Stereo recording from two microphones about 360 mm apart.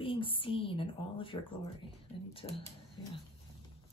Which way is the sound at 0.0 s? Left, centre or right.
Centre.